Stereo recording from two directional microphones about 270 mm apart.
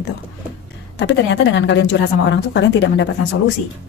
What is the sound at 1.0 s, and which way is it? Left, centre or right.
A woman's voice, left.